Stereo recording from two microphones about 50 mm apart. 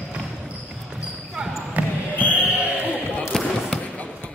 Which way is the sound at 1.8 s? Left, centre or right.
Right.